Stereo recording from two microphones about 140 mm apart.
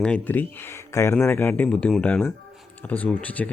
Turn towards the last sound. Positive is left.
turn(degrees=10)  # may be behind; listen again after turning